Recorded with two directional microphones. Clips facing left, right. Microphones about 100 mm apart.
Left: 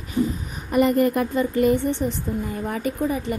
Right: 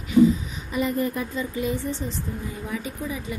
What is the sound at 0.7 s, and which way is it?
A woman's voice, 65° left (ahead or behind).